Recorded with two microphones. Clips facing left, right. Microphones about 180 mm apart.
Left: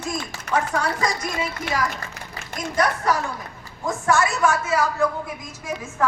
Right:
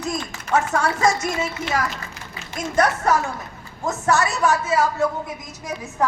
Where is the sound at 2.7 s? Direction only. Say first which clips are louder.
Right 3 dB; 45° right (ahead or behind).